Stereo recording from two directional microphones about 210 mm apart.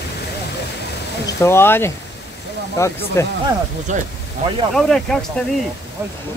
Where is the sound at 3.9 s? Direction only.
35° right (ahead or behind).